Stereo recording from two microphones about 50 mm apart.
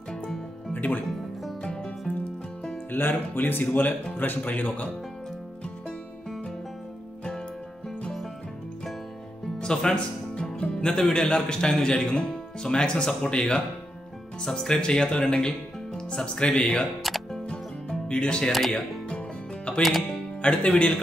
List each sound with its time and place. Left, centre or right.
0.7 s speech: left
1.6 s music: centre
2.9 s speech: left
9.6 s speech: centre
17.3 s music: centre
18.5 s music: centre
19.0 s music: left
19.8 s music: centre
20.4 s speech: left